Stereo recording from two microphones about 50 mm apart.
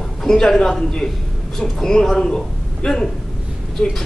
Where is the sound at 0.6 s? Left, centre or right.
Centre.